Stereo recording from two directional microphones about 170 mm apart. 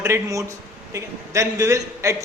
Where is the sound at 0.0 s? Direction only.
15° right (ahead or behind).